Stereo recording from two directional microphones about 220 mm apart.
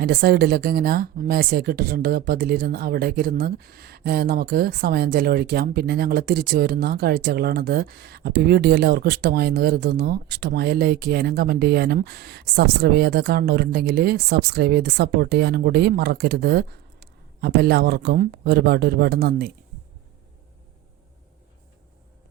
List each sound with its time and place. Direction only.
0.0 s speech: 45° right (ahead or behind)